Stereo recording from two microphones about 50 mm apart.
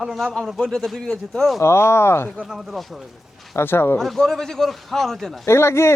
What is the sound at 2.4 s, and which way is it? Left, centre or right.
Speech, centre.